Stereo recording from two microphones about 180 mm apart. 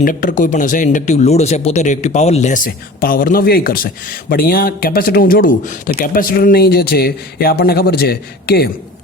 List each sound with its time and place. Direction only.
0.0 s speech: 50° left (ahead or behind)